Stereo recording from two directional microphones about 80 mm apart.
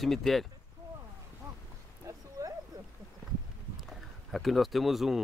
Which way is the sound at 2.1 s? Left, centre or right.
Right.